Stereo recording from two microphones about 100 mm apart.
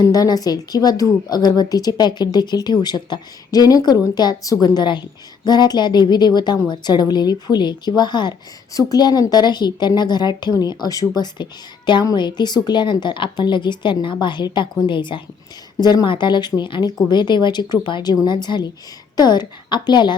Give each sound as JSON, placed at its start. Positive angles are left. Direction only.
{"t": 0.0, "sound": "a woman's voice", "side_deg": 40}